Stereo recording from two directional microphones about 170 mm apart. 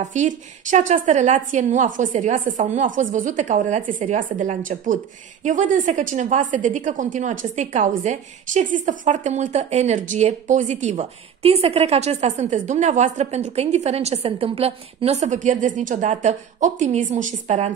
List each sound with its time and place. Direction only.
0.0 s a woman's voice: 45° right (ahead or behind)